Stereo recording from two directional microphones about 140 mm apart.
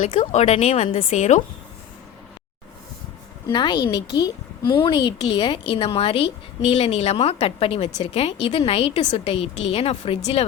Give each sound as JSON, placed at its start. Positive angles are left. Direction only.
{"t": 0.0, "sound": "a woman's voice", "side_deg": 50}
{"t": 3.5, "sound": "a woman's voice", "side_deg": 35}